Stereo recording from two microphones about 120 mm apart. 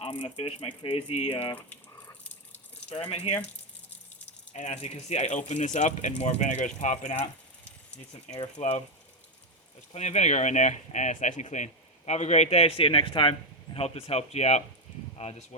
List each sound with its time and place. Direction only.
0.0 s speech: 45° left (ahead or behind)
2.9 s speech: 60° left (ahead or behind)
4.5 s speech: 70° left (ahead or behind)
8.3 s speech: 70° left (ahead or behind)
9.9 s speech: 70° left (ahead or behind); by 13.3 s 45° left (ahead or behind)
13.7 s speech: 55° left (ahead or behind)